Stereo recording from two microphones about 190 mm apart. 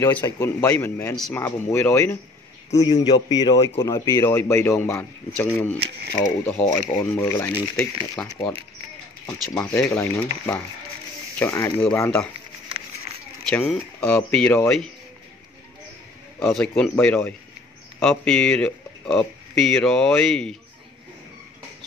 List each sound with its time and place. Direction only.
0.0 s speech: 15° left (ahead or behind)
11.3 s speech: 15° left (ahead or behind)
13.7 s speech: 5° left (ahead or behind)
16.3 s speech: 5° left (ahead or behind)